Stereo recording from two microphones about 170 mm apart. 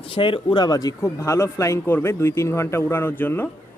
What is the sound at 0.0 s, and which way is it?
Speech, 30° left (ahead or behind).